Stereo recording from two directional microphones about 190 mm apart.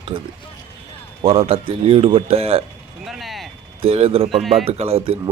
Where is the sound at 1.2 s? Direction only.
30° right (ahead or behind).